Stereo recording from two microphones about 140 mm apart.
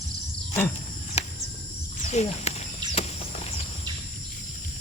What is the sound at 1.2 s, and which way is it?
Cricket, 50° left (ahead or behind).